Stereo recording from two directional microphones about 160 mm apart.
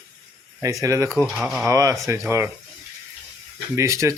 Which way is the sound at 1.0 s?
5° left (ahead or behind).